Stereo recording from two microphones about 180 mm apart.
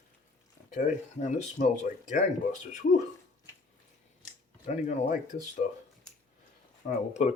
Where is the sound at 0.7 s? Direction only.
45° left (ahead or behind).